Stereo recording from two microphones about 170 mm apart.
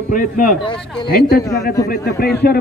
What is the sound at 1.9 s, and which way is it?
Speech, 70° left (ahead or behind).